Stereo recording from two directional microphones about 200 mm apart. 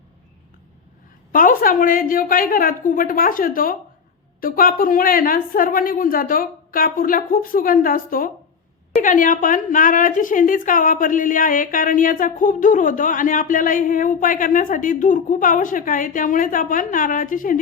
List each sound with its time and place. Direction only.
1.3 s a woman's voice: 45° left (ahead or behind)